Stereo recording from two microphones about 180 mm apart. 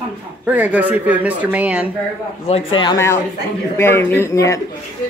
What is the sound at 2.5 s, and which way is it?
Speech, 30° left (ahead or behind).